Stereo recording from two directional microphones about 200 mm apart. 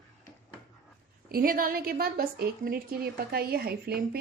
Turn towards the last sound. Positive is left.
turn(degrees=-50)  # may be behind; listen again after turning